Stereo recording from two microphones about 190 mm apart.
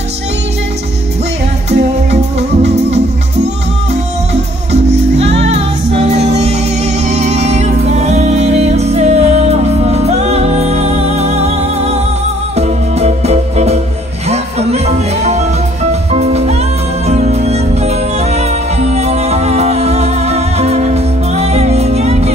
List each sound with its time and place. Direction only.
5.1 s music: 35° right (ahead or behind)